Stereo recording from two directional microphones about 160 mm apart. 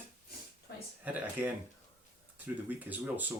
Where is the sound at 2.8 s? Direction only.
10° right (ahead or behind).